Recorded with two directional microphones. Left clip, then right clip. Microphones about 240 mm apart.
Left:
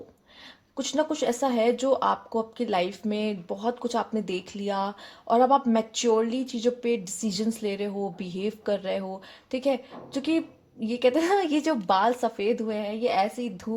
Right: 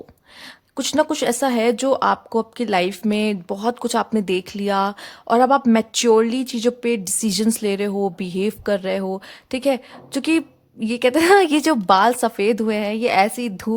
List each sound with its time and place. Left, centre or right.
0.8 s speech: right